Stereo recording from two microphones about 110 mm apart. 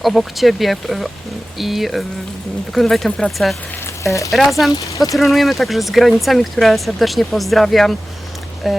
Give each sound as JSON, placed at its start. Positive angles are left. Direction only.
{"t": 0.0, "sound": "speech", "side_deg": 0}
{"t": 4.0, "sound": "speech", "side_deg": 30}
{"t": 4.3, "sound": "speech", "side_deg": 0}
{"t": 4.7, "sound": "speech", "side_deg": 30}
{"t": 5.1, "sound": "speech", "side_deg": 0}